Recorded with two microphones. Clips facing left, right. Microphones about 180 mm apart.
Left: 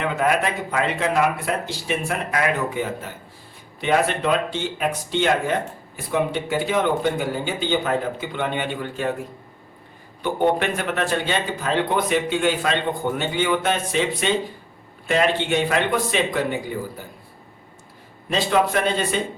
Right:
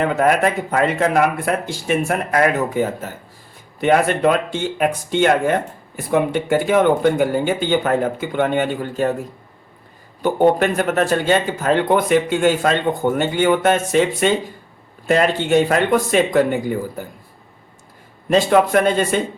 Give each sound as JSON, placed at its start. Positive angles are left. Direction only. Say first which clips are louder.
{"t": 0.0, "sound": "speech", "louder": "right 5 dB", "side_deg": -45}
{"t": 10.2, "sound": "speech", "louder": "right 5 dB", "side_deg": -45}
{"t": 18.3, "sound": "speech", "louder": "right 6 dB", "side_deg": -50}